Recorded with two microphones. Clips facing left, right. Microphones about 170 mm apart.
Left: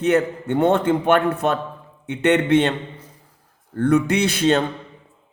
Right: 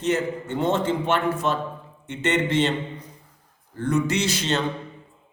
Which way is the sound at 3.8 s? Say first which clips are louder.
Left 6 dB; 60° left (ahead or behind).